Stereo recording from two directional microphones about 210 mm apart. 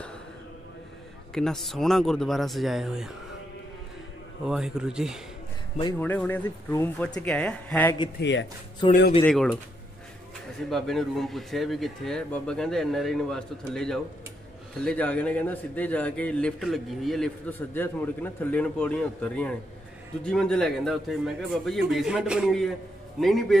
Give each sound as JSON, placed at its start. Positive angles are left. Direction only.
{"t": 1.3, "sound": "speech", "side_deg": 0}
{"t": 4.5, "sound": "speech", "side_deg": -5}
{"t": 5.9, "sound": "a man's voice", "side_deg": 10}
{"t": 8.2, "sound": "speech", "side_deg": 60}
{"t": 8.8, "sound": "speech", "side_deg": 20}
{"t": 9.2, "sound": "speech", "side_deg": 0}
{"t": 10.7, "sound": "a man's voice", "side_deg": 0}